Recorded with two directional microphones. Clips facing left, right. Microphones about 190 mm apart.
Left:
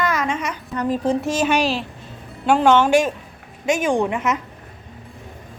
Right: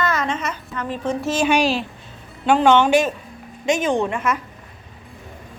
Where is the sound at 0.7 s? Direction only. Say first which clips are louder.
Left 5 dB; 40° left (ahead or behind).